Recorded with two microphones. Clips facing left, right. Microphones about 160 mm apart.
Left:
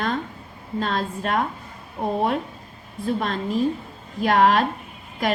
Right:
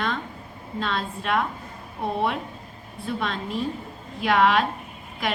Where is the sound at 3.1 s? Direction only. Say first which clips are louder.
Left 4 dB; 45° left (ahead or behind).